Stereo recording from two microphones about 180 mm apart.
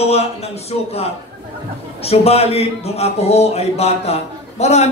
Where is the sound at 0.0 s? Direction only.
35° left (ahead or behind).